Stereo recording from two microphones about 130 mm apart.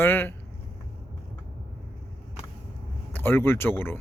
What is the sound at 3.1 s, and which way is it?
Speech, 15° left (ahead or behind).